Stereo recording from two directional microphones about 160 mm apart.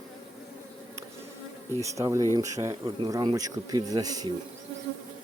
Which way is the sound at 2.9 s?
35° right (ahead or behind).